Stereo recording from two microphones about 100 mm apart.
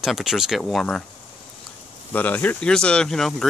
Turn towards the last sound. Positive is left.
turn(degrees=5)  # may be behind; listen again after turning